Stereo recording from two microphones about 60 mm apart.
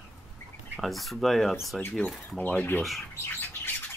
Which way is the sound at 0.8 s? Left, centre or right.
Centre.